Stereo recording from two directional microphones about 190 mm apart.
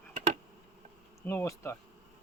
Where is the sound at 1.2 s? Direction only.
15° left (ahead or behind).